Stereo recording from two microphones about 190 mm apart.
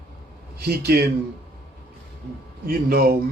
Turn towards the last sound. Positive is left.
turn(degrees=-55)  # may be behind; listen again after turning